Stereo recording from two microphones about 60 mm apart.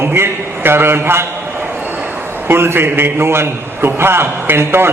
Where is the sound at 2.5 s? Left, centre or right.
Right.